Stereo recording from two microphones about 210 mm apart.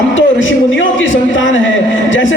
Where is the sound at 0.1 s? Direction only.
65° left (ahead or behind).